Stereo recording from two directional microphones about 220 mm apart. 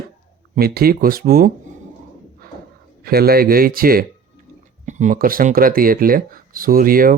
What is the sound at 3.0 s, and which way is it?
Speech, 45° right (ahead or behind).